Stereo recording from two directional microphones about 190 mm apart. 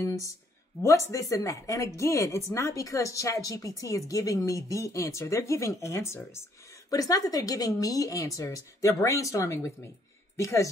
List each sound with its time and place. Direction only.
0.8 s speech: 15° left (ahead or behind)